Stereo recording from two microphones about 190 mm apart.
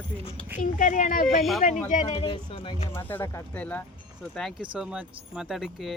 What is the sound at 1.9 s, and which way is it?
Speech, 35° left (ahead or behind).